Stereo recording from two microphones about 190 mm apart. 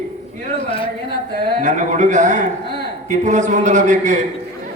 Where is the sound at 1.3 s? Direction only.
45° right (ahead or behind).